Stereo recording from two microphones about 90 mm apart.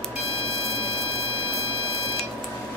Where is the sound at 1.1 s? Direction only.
35° right (ahead or behind).